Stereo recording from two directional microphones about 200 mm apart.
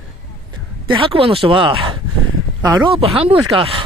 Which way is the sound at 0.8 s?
25° right (ahead or behind).